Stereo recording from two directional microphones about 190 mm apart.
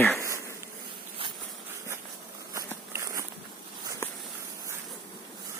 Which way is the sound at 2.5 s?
15° right (ahead or behind).